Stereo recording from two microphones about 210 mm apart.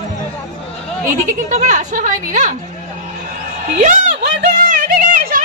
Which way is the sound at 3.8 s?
35° right (ahead or behind).